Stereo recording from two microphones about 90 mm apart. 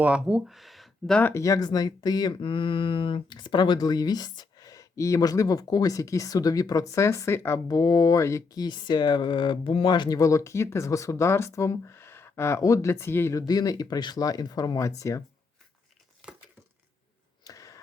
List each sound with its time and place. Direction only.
0.0 s speech: 10° right (ahead or behind)
0.4 s speech: centre (ahead or behind)
1.2 s speech: 30° left (ahead or behind); by 2.3 s 50° left (ahead or behind)
2.3 s speech: 70° left (ahead or behind); by 7.6 s 30° left (ahead or behind)
7.7 s speech: 40° left (ahead or behind)
8.5 s speech: 55° left (ahead or behind)
10.2 s speech: 35° left (ahead or behind)
13.3 s speech: 45° left (ahead or behind)
17.4 s a sound: 40° left (ahead or behind)